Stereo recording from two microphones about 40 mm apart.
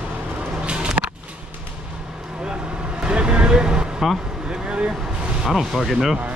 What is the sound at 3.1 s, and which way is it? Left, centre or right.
Vehicle, right.